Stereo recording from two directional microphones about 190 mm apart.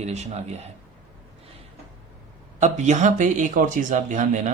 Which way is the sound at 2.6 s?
40° right (ahead or behind).